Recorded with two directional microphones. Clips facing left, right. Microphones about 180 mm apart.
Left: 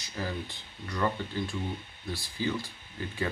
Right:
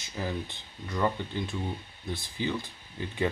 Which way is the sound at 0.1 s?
15° right (ahead or behind).